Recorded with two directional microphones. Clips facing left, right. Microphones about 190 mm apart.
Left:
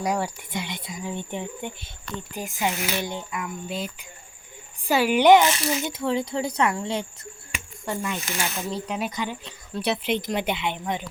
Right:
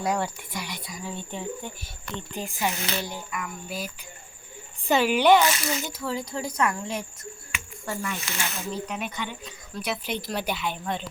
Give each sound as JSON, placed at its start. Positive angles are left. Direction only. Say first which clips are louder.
{"t": 0.0, "sound": "speech", "louder": "left 1 dB", "side_deg": 10}
{"t": 0.5, "sound": "speech", "louder": "left 3 dB", "side_deg": 25}
{"t": 2.1, "sound": "speech", "louder": "left 1 dB", "side_deg": 10}
{"t": 3.1, "sound": "speech", "louder": "left 3 dB", "side_deg": 25}
{"t": 4.9, "sound": "speech", "louder": "left 3 dB", "side_deg": 10}
{"t": 8.7, "sound": "speech", "louder": "left 3 dB", "side_deg": 35}